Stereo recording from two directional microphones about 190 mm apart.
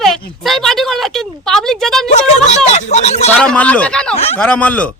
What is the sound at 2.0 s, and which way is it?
Speech, 35° left (ahead or behind).